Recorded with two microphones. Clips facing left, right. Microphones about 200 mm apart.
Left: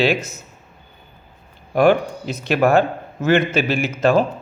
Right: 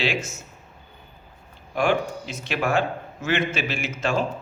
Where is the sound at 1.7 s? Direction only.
55° left (ahead or behind).